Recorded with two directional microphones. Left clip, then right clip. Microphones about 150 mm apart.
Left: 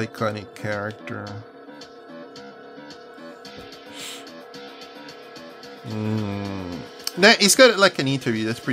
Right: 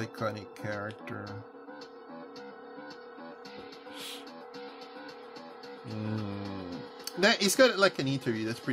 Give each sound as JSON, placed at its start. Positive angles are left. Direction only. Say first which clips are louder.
{"t": 0.0, "sound": "speech", "louder": "left 9 dB", "side_deg": 15}
{"t": 5.9, "sound": "speech", "louder": "left 10 dB", "side_deg": 20}